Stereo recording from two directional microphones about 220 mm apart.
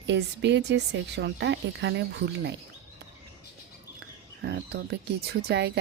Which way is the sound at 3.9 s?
50° right (ahead or behind).